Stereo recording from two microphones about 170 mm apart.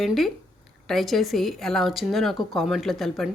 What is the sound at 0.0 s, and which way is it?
Speech, centre (ahead or behind).